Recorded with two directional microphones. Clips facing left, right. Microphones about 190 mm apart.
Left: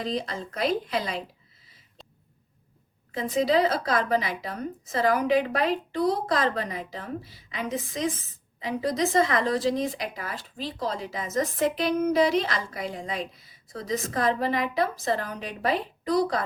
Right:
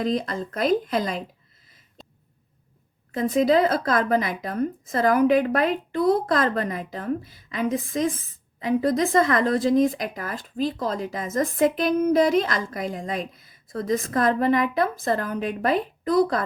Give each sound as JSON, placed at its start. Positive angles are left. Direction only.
{"t": 0.0, "sound": "speech", "side_deg": -50}
{"t": 3.1, "sound": "speech", "side_deg": -50}